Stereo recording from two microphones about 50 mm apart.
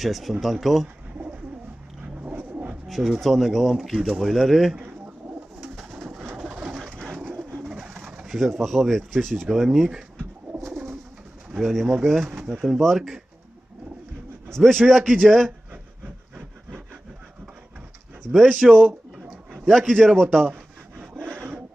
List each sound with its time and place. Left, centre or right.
0.0 s speech: centre
2.2 s dog: right
2.8 s speech: centre
4.8 s pigeon: right
5.7 s bird: centre
8.3 s speech: centre
11.6 s speech: centre
14.5 s speech: centre
16.3 s wood: centre
18.2 s speech: centre
18.9 s pigeon: right
19.6 s a man's voice: centre